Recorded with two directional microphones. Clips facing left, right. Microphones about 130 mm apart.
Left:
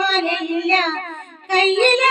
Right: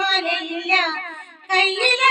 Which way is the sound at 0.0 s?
40° left (ahead or behind).